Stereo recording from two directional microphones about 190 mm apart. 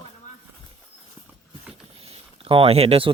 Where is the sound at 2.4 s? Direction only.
30° right (ahead or behind).